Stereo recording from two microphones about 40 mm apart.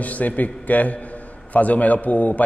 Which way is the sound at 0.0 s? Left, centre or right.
Left.